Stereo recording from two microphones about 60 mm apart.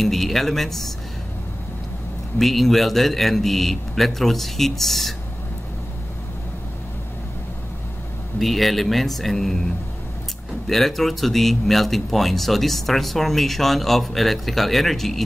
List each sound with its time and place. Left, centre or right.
0.0 s speech: centre
2.3 s speech: centre
8.4 s speech: centre
10.7 s speech: centre